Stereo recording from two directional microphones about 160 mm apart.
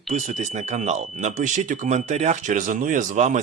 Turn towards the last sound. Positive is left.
turn(degrees=-50)  # may be behind; listen again after turning